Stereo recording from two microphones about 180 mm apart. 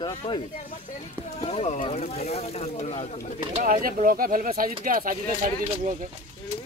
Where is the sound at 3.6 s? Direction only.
50° right (ahead or behind).